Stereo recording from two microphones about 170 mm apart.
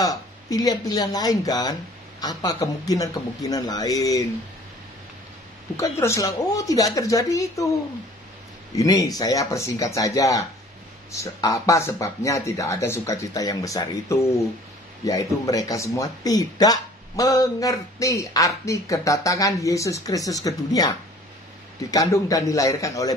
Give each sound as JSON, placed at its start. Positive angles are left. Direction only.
{"t": 0.0, "sound": "speech", "side_deg": 20}
{"t": 5.8, "sound": "speech", "side_deg": 15}
{"t": 8.7, "sound": "speech", "side_deg": 20}
{"t": 21.9, "sound": "speech", "side_deg": 20}